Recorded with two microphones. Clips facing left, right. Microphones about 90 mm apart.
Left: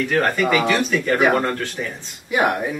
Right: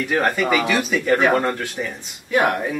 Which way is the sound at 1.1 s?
5° left (ahead or behind).